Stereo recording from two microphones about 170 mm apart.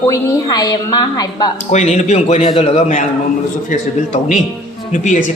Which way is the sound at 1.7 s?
45° left (ahead or behind).